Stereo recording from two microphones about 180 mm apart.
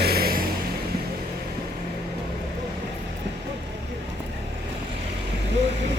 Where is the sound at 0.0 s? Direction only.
60° right (ahead or behind).